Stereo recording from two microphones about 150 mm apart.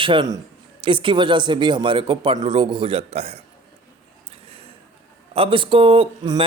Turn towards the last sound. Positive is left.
turn(degrees=-30)  # may be behind; listen again after turning